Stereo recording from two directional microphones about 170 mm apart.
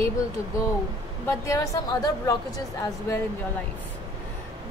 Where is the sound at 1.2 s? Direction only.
20° left (ahead or behind).